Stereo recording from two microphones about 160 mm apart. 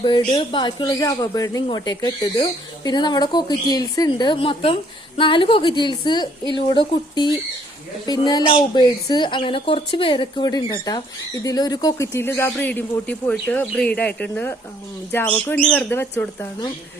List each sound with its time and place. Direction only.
0.0 s speech: 30° left (ahead or behind); by 16.5 s 15° left (ahead or behind)